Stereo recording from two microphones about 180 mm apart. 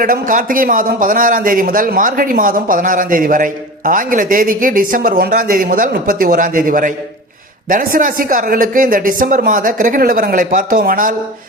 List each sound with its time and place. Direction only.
0.0 s a man's voice: 50° right (ahead or behind)